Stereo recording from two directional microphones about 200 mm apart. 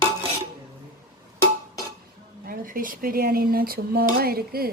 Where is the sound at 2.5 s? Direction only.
45° right (ahead or behind).